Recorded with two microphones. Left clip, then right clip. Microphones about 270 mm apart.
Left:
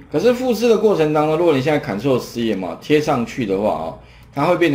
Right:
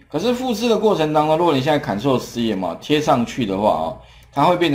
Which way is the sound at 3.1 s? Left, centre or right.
Right.